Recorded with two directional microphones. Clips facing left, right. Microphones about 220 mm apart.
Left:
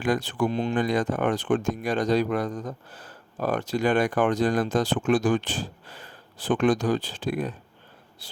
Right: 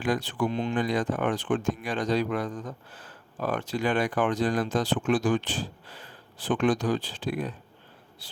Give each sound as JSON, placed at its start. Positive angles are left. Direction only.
{"t": 0.0, "sound": "speech", "side_deg": 45}